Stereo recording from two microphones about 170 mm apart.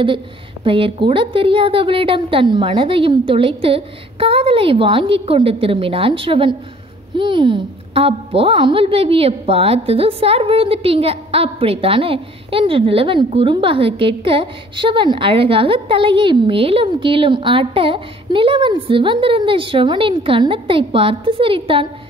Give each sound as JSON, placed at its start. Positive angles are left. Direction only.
{"t": 0.7, "sound": "a woman's voice", "side_deg": -30}